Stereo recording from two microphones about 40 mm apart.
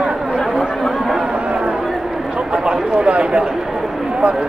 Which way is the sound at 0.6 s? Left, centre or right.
Centre.